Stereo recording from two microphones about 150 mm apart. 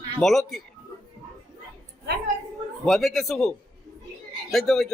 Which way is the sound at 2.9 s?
Centre (ahead or behind).